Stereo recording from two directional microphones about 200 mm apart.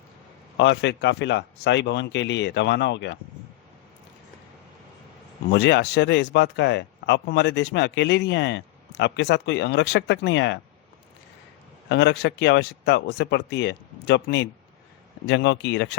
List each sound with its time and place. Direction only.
0.5 s speech: 60° left (ahead or behind)
5.5 s speech: 60° left (ahead or behind)
11.9 s speech: 60° left (ahead or behind)